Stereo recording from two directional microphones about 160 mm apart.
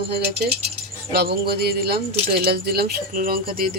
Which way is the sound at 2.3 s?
75° right (ahead or behind).